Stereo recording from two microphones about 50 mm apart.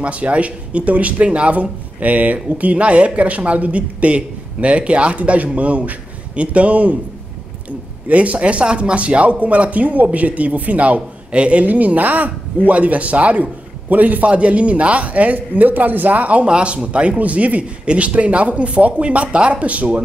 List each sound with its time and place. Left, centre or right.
0.0 s speech: right
8.1 s speech: right